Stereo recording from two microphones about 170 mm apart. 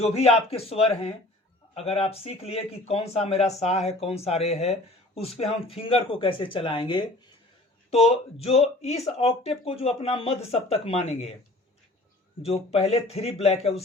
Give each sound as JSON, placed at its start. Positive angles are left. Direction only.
{"t": 0.0, "sound": "speech", "side_deg": 40}
{"t": 12.4, "sound": "speech", "side_deg": 35}